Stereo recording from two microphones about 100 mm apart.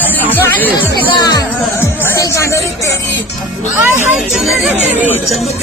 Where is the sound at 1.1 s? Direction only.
45° left (ahead or behind).